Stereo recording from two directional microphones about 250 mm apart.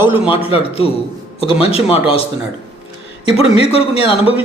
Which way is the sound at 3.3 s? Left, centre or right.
Left.